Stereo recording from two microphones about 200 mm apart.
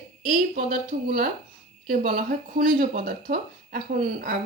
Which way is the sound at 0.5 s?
45° right (ahead or behind).